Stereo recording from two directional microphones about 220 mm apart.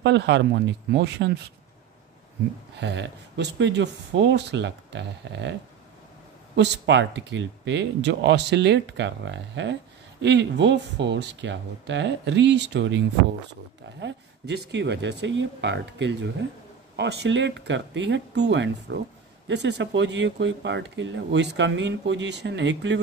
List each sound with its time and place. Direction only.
0.0 s speech: 55° right (ahead or behind)
2.8 s speech: 50° right (ahead or behind)
6.5 s speech: 55° right (ahead or behind)